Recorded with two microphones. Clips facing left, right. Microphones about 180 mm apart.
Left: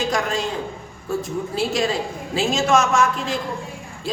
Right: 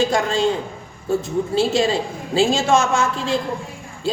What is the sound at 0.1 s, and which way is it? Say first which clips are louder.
A woman's voice: right 4 dB; 30° right (ahead or behind).